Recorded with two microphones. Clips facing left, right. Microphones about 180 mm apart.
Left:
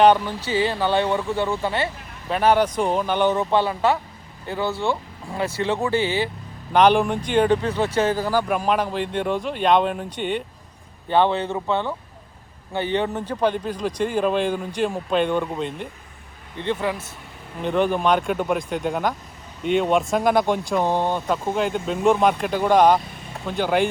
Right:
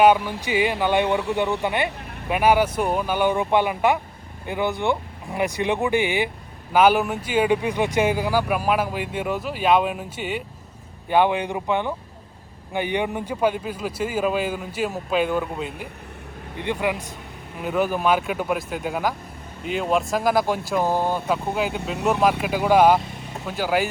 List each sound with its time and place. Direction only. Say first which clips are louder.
0.0 s speech: left 1 dB; 10° right (ahead or behind)